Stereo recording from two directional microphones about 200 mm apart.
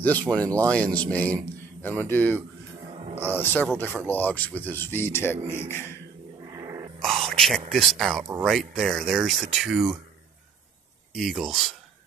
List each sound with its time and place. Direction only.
0.0 s a man's voice: 5° left (ahead or behind)
3.7 s a man's voice: 10° left (ahead or behind)
6.5 s dog: 15° right (ahead or behind)
7.0 s a sound: centre (ahead or behind)
7.7 s speech: centre (ahead or behind)
11.1 s speech: centre (ahead or behind)